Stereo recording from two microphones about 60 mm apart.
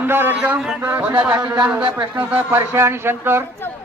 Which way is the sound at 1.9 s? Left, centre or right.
Right.